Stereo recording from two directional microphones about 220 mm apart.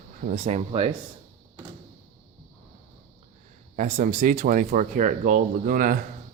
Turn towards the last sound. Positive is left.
turn(degrees=-40)  # may be behind; listen again after turning